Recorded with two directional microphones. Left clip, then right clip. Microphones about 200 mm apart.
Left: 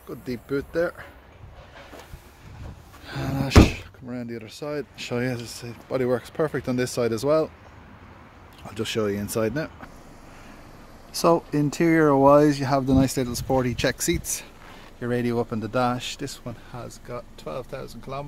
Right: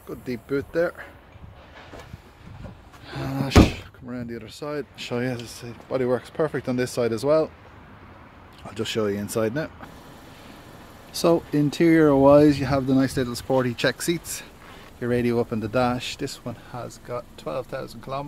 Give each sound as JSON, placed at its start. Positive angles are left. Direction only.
{"t": 0.1, "sound": "speech", "side_deg": 0}
{"t": 3.1, "sound": "speech", "side_deg": 25}
{"t": 8.6, "sound": "speech", "side_deg": 10}
{"t": 11.1, "sound": "speech", "side_deg": 5}
{"t": 16.7, "sound": "speech", "side_deg": -25}